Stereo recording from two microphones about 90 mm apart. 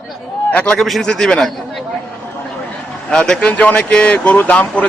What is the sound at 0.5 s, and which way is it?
A man's voice, 10° left (ahead or behind).